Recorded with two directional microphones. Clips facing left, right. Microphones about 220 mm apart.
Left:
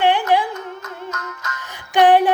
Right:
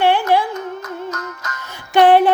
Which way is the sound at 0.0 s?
15° left (ahead or behind).